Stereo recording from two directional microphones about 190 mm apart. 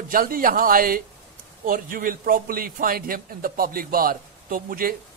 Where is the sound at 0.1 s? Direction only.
50° right (ahead or behind).